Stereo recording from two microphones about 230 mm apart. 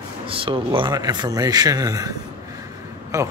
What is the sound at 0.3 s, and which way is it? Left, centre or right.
A man's voice, right.